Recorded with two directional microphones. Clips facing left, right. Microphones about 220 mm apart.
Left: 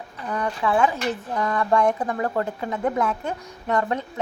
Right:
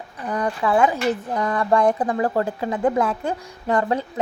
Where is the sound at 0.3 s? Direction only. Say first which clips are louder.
Right 3 dB; 35° right (ahead or behind).